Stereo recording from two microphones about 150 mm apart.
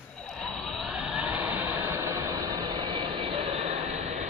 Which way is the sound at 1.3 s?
15° right (ahead or behind).